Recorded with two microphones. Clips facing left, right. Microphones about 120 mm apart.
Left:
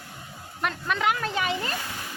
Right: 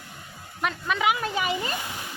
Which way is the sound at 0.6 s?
Centre (ahead or behind).